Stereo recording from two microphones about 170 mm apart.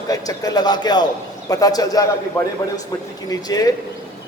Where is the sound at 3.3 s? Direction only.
20° left (ahead or behind).